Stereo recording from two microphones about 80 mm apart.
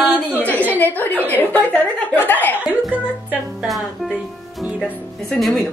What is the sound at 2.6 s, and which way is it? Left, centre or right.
Music, centre.